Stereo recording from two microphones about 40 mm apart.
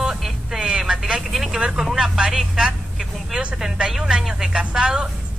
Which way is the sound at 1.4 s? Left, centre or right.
Centre.